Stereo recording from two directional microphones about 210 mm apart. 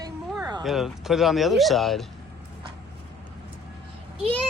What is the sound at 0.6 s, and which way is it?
Speech, centre (ahead or behind).